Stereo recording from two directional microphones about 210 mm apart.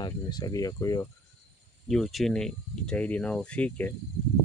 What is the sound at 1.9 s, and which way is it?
Speech, centre (ahead or behind).